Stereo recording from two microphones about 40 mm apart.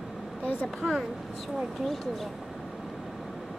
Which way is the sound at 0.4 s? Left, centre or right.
Left.